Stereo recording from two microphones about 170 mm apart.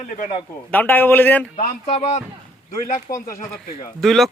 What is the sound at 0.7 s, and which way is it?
Speech, 10° left (ahead or behind).